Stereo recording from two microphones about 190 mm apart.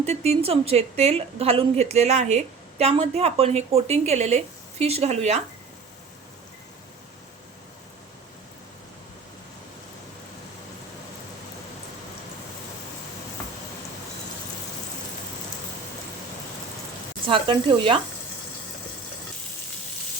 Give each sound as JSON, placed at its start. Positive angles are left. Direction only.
{"t": 0.0, "sound": "a woman's voice", "side_deg": -35}
{"t": 17.2, "sound": "speech", "side_deg": -25}